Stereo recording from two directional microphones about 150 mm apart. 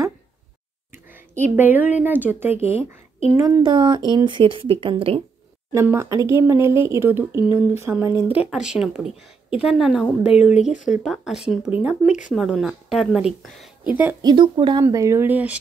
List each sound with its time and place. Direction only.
0.9 s a woman's voice: 15° right (ahead or behind); by 5.2 s 40° right (ahead or behind)
5.7 s speech: 15° right (ahead or behind)
14.2 s speech: 30° right (ahead or behind); by 15.6 s 10° right (ahead or behind)